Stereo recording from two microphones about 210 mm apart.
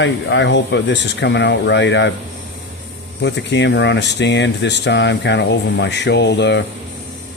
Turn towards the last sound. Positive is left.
turn(degrees=55)  # may be behind; listen again after turning